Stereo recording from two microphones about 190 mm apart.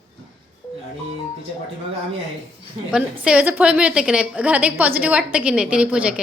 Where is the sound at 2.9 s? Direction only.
5° right (ahead or behind).